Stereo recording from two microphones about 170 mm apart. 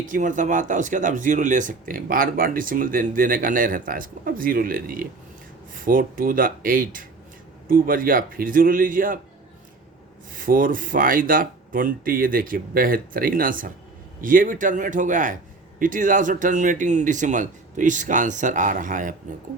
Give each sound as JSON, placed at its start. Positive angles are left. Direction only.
{"t": 0.0, "sound": "speech", "side_deg": -50}
{"t": 10.3, "sound": "speech", "side_deg": -55}